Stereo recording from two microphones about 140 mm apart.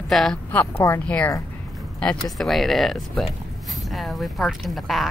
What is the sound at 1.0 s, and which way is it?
Speech, 10° left (ahead or behind).